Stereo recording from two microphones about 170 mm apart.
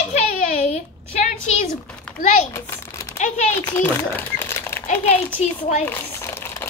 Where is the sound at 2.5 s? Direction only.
15° left (ahead or behind).